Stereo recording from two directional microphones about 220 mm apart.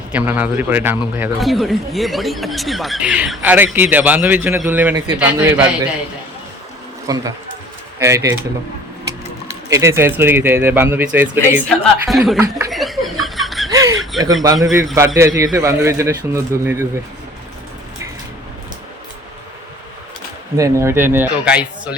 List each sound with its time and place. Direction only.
0.1 s a man's voice: 5° right (ahead or behind)
7.1 s a man's voice: 15° right (ahead or behind)
9.6 s a man's voice: 15° right (ahead or behind)
12.4 s a man's voice: 10° right (ahead or behind)
12.7 s chuckle: centre (ahead or behind)
13.2 s laughter: centre (ahead or behind)
13.7 s snicker: 15° right (ahead or behind)
14.0 s chuckle: centre (ahead or behind)
14.4 s a man's voice: 15° right (ahead or behind)
20.6 s a man's voice: 15° right (ahead or behind)